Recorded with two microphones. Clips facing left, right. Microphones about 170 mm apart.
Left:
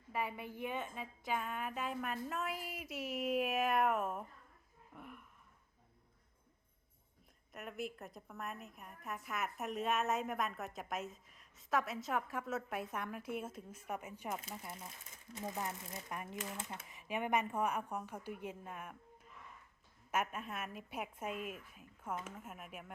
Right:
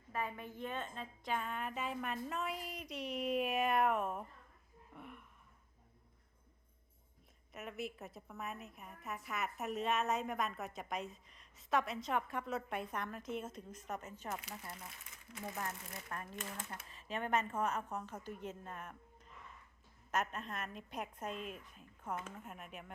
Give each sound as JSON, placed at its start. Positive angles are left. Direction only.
{"t": 0.1, "sound": "a woman's voice", "side_deg": 10}
{"t": 7.5, "sound": "a woman's voice", "side_deg": 0}